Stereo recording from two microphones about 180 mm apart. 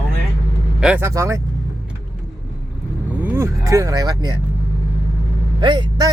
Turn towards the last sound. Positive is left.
turn(degrees=-25)  # may be behind; listen again after turning